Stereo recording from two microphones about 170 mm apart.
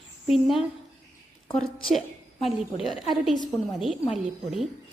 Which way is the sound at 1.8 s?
Centre (ahead or behind).